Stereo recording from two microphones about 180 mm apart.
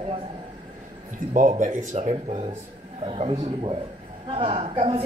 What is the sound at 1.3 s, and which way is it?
A woman's voice, 45° right (ahead or behind).